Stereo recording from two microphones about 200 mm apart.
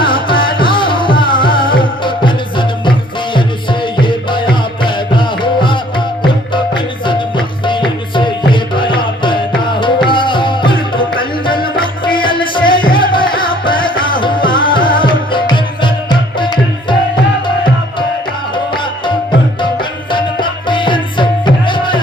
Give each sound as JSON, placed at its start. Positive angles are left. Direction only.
{"t": 0.0, "sound": "music", "side_deg": 25}
{"t": 18.5, "sound": "music", "side_deg": 25}